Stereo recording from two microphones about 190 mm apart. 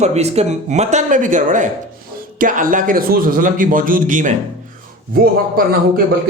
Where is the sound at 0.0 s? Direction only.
35° right (ahead or behind).